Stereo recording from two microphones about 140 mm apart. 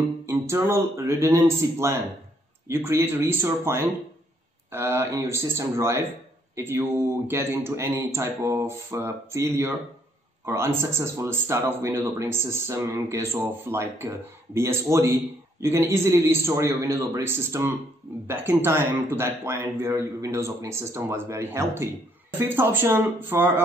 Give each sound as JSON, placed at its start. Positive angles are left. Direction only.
{"t": 0.3, "sound": "speech", "side_deg": -20}